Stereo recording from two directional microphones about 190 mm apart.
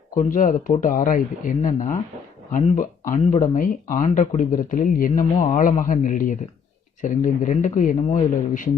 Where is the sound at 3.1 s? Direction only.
40° left (ahead or behind).